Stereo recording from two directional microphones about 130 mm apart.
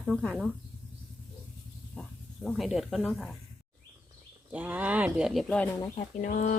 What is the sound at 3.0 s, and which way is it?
Speech, 5° left (ahead or behind).